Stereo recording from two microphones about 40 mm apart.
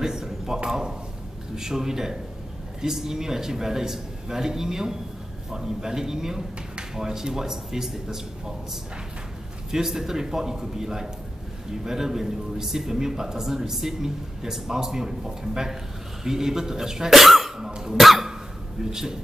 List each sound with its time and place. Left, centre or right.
0.0 s a sound: centre
0.7 s speech: centre
9.7 s speech: centre
17.6 s cough: centre
17.9 s cough: centre
18.9 s speech: centre